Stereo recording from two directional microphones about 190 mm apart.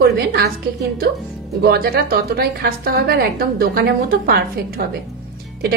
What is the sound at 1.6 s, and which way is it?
A woman's voice, 55° right (ahead or behind).